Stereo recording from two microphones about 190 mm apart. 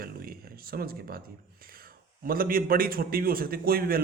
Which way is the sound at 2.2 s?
50° right (ahead or behind).